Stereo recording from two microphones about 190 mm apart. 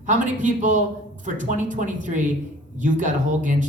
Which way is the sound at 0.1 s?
40° right (ahead or behind).